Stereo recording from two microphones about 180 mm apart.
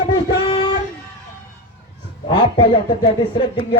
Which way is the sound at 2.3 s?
30° left (ahead or behind).